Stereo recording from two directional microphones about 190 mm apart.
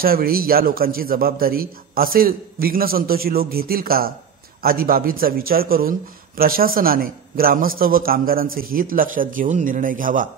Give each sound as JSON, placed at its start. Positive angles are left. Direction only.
{"t": 0.0, "sound": "a man's voice", "side_deg": -50}